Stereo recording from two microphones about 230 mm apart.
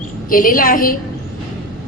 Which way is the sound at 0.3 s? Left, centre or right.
Left.